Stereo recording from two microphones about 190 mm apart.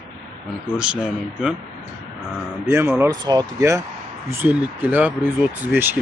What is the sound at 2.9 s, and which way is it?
Speech, 10° right (ahead or behind).